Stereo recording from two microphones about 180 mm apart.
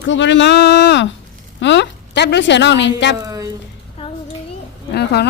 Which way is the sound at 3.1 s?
20° right (ahead or behind).